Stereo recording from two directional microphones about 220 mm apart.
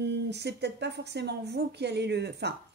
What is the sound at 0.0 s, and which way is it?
Speech, 50° right (ahead or behind).